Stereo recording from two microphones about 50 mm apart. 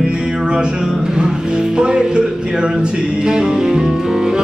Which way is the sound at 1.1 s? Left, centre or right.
Centre.